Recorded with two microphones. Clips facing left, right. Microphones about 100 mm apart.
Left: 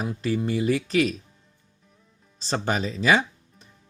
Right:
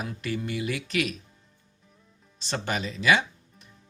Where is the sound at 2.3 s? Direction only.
35° left (ahead or behind).